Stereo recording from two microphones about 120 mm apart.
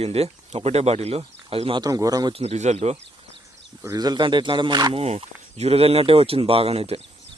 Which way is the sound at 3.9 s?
35° right (ahead or behind).